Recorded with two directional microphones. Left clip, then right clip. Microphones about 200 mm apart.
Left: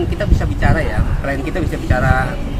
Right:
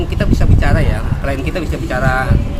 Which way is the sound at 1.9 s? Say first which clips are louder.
Right 1 dB; 10° right (ahead or behind).